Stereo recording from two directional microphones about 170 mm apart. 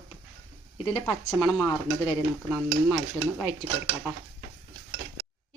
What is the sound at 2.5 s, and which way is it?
Stir, centre (ahead or behind).